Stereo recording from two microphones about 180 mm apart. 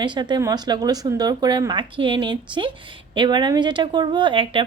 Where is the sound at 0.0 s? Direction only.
25° right (ahead or behind).